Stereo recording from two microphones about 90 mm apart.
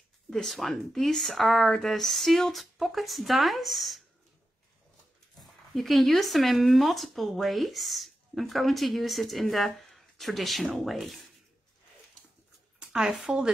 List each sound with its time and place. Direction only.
0.3 s speech: 5° left (ahead or behind)
5.8 s speech: centre (ahead or behind)
12.7 s speech: 10° right (ahead or behind)